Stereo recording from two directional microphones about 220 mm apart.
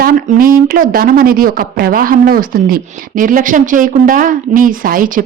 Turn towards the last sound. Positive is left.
turn(degrees=-40)  # may be behind; listen again after turning